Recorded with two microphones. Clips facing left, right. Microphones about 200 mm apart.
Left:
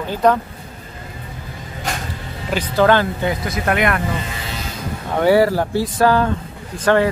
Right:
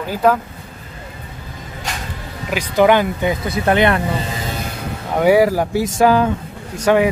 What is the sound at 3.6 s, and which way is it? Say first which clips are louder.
Speech: right 4 dB; 30° right (ahead or behind).